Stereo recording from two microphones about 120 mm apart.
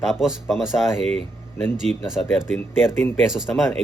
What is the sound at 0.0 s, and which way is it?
Speech, 5° right (ahead or behind).